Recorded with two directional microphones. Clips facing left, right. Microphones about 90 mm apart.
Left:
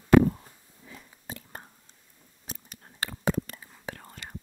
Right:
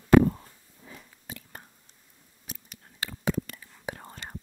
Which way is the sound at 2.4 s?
40° left (ahead or behind).